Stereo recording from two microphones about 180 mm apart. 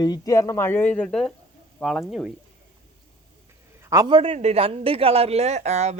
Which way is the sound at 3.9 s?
25° right (ahead or behind).